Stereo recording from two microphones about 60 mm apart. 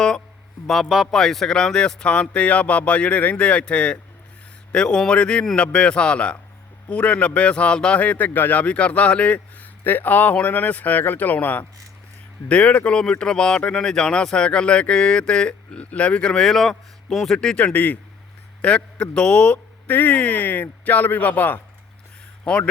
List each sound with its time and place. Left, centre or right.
0.7 s a man's voice: centre; by 9.6 s left
9.8 s speech: left; by 17.6 s centre
17.6 s speech: left
19.9 s speech: left
22.4 s speech: centre